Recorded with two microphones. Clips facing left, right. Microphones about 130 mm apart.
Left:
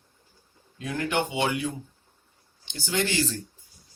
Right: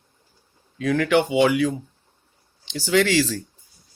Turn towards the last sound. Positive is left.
turn(degrees=-75)  # may be behind; listen again after turning